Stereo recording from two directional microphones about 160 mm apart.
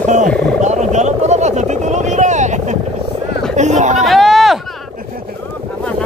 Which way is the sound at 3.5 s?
50° right (ahead or behind).